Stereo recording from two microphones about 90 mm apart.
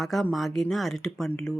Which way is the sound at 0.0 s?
Centre (ahead or behind).